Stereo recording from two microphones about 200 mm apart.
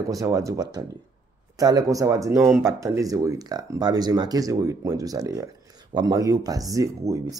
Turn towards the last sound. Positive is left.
turn(degrees=-15)  # may be behind; listen again after turning